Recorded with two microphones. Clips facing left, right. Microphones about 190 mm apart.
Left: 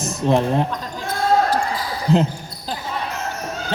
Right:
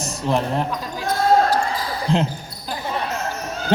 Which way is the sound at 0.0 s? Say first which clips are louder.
Left 4 dB; 20° left (ahead or behind).